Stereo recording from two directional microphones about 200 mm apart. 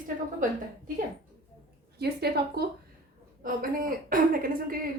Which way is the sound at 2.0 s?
55° right (ahead or behind).